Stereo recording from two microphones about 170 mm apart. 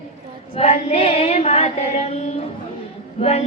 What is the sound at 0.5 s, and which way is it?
Female singing, 40° left (ahead or behind).